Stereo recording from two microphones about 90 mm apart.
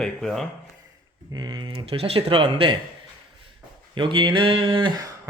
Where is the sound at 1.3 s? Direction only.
55° right (ahead or behind).